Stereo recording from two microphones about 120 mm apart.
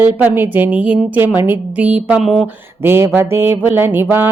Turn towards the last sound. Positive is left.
turn(degrees=-15)  # may be behind; listen again after turning